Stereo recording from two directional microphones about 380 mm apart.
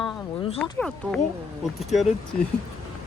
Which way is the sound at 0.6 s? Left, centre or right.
Centre.